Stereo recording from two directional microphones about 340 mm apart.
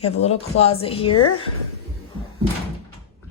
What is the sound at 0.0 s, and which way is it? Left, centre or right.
Speech, centre.